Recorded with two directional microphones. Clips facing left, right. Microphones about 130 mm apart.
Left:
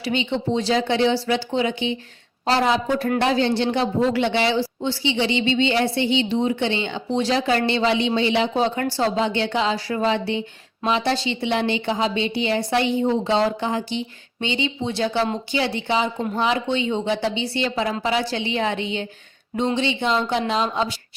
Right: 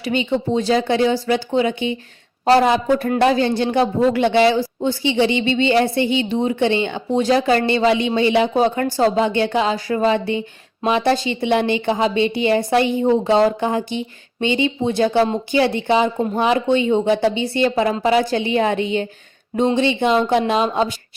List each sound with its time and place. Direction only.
0.0 s a woman's voice: 45° right (ahead or behind)